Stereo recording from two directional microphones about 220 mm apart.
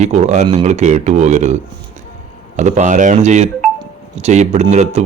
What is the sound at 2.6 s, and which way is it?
Speech, 30° right (ahead or behind).